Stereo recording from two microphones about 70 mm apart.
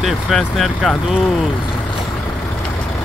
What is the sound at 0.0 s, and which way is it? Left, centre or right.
Speech, centre.